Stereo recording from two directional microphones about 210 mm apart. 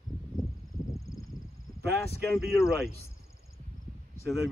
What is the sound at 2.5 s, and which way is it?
Speech, 15° left (ahead or behind).